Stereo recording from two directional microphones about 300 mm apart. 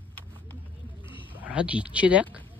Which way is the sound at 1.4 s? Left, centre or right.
Centre.